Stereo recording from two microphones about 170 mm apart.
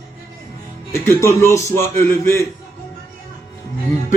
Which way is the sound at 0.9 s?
15° left (ahead or behind).